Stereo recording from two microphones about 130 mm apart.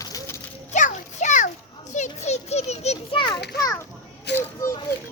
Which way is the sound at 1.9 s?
60° left (ahead or behind).